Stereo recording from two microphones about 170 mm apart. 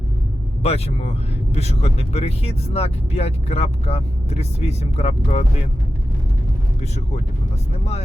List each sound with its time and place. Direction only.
0.6 s speech: 35° left (ahead or behind)